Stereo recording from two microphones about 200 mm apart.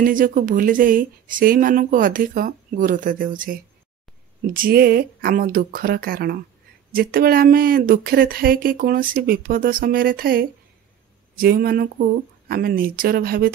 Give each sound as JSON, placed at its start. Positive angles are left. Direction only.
{"t": 0.0, "sound": "speech", "side_deg": -45}
{"t": 4.6, "sound": "speech", "side_deg": -50}